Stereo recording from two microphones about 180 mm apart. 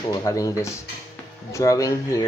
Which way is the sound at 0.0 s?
20° left (ahead or behind).